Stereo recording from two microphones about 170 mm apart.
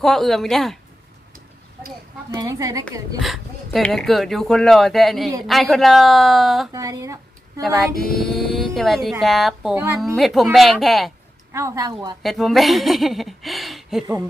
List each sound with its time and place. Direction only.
0.0 s speech: centre (ahead or behind)
2.3 s a woman's voice: 20° right (ahead or behind)
3.2 s speech: centre (ahead or behind)
6.7 s speech: 20° right (ahead or behind)
8.1 s speech: centre (ahead or behind)
11.5 s a woman's voice: 20° right (ahead or behind)
12.2 s speech: centre (ahead or behind)